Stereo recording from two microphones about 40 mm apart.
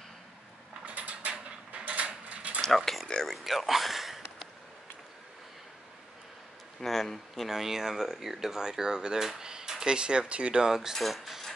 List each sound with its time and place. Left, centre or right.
0.8 s mechanisms: right
1.7 s a sound: right
2.6 s a sound: centre
6.8 s speech: centre
7.4 s speech: centre; by 10.6 s right
10.6 s speech: centre
11.0 s speech: centre